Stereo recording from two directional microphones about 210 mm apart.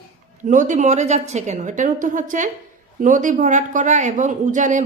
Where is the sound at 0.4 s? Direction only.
40° right (ahead or behind).